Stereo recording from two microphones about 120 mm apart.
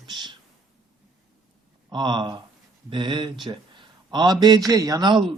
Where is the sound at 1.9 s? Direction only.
40° right (ahead or behind).